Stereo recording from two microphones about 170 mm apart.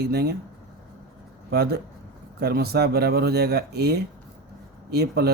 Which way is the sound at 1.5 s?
70° right (ahead or behind).